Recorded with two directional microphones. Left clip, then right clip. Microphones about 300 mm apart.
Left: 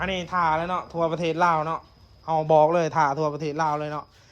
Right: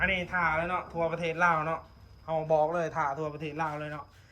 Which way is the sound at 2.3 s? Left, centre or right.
Left.